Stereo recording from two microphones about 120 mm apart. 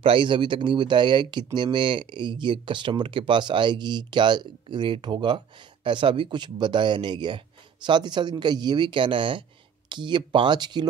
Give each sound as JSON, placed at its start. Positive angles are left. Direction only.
{"t": 0.0, "sound": "speech", "side_deg": -45}